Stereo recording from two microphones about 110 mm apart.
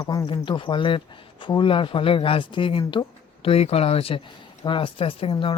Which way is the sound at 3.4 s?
65° left (ahead or behind).